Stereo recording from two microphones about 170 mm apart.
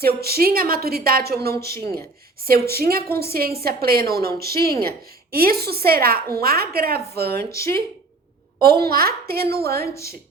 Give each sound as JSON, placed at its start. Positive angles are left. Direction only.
{"t": 0.0, "sound": "a woman's voice", "side_deg": -65}
{"t": 1.6, "sound": "speech", "side_deg": 15}
{"t": 2.4, "sound": "a woman's voice", "side_deg": -65}
{"t": 7.5, "sound": "speech", "side_deg": 15}
{"t": 8.6, "sound": "a woman's voice", "side_deg": -65}